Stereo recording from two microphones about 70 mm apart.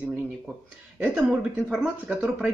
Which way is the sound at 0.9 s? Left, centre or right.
Centre.